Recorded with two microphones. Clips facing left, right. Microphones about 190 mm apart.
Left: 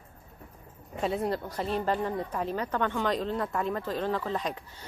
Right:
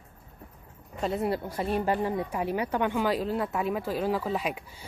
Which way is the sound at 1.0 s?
Centre (ahead or behind).